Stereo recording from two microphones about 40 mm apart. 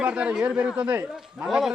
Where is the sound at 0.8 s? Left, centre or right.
Right.